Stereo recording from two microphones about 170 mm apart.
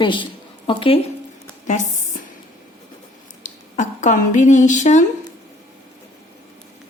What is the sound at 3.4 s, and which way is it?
Speech, 45° left (ahead or behind).